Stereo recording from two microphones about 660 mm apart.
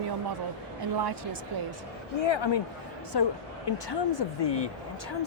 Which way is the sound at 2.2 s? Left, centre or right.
Left.